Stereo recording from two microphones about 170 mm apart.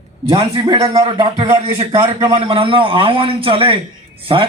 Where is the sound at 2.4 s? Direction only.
30° right (ahead or behind).